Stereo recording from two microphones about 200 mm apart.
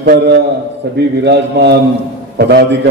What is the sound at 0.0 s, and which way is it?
A man's voice, 55° right (ahead or behind).